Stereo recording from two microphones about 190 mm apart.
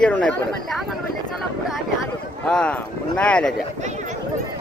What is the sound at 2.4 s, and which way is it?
Speech, 5° left (ahead or behind).